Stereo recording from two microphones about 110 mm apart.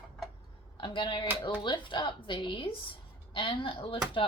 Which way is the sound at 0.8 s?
45° left (ahead or behind).